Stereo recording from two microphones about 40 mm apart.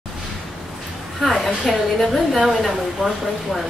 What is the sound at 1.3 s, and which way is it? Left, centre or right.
A woman's voice, centre.